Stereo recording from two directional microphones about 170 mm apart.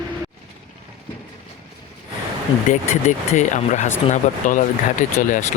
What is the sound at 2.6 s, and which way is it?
Speech, 45° left (ahead or behind).